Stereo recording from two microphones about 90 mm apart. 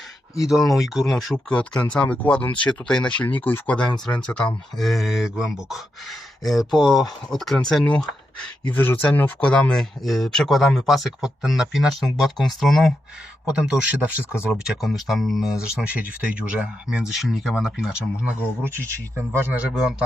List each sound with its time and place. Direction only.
0.4 s speech: centre (ahead or behind)
1.8 s speech: 15° left (ahead or behind)
9.4 s speech: 10° left (ahead or behind)
13.4 s speech: 10° right (ahead or behind)
14.6 s speech: 5° right (ahead or behind)
19.3 s a man's voice: 25° right (ahead or behind)